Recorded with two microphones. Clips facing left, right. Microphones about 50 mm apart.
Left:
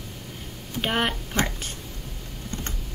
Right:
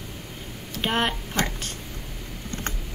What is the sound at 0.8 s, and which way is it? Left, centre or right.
Speech, centre.